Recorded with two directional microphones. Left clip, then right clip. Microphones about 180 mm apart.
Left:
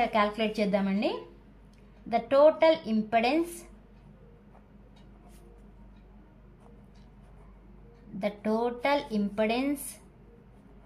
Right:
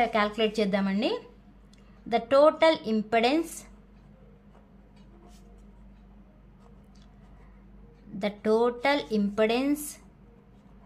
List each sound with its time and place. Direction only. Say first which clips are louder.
0.0 s a woman's voice: right 1 dB; 25° right (ahead or behind)
8.2 s speech: right 4 dB; 35° right (ahead or behind)